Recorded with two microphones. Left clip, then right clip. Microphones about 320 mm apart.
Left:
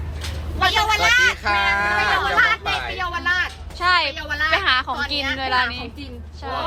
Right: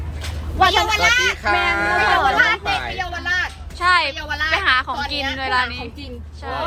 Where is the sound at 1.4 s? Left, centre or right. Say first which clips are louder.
Right 1 dB; right.